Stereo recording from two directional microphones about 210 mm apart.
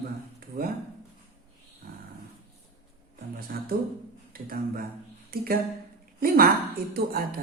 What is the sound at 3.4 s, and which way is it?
Speech, 45° right (ahead or behind).